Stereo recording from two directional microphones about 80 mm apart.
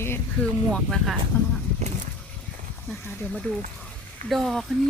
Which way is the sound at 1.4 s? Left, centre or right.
Left.